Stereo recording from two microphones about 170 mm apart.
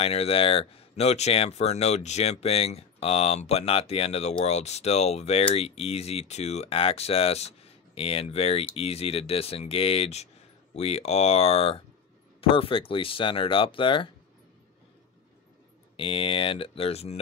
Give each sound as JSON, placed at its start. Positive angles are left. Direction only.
{"t": 0.0, "sound": "speech", "side_deg": 35}
{"t": 16.0, "sound": "speech", "side_deg": 30}